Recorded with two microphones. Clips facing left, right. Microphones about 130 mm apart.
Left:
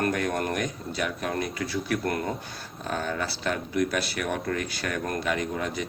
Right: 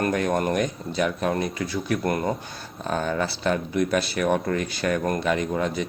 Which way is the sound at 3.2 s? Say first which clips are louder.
Right 5 dB; 25° right (ahead or behind).